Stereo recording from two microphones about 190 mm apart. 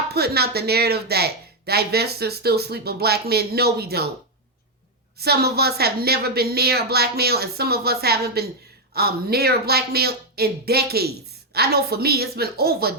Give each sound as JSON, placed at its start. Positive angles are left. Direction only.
{"t": 0.1, "sound": "speech", "side_deg": -55}
{"t": 5.2, "sound": "speech", "side_deg": -55}